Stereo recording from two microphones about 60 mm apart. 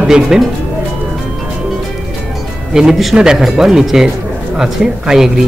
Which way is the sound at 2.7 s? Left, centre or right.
Centre.